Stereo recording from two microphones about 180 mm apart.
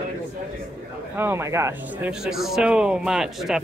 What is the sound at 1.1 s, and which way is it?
Speech, 15° right (ahead or behind).